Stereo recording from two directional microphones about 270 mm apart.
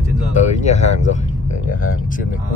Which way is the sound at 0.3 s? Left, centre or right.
Left.